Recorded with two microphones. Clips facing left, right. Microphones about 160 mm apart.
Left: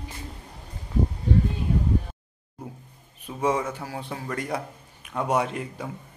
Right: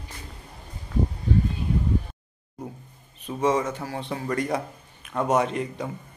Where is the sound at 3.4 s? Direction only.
10° left (ahead or behind).